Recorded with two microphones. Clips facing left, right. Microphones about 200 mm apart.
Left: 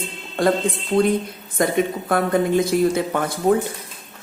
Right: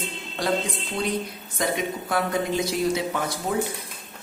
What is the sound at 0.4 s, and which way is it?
Speech, 50° left (ahead or behind).